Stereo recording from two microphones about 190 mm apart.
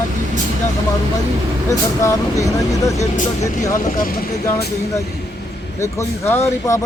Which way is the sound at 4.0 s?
50° left (ahead or behind).